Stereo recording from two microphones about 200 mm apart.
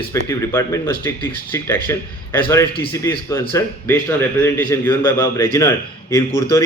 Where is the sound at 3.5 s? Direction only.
10° left (ahead or behind).